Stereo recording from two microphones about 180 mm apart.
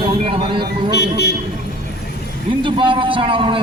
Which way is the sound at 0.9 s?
65° left (ahead or behind).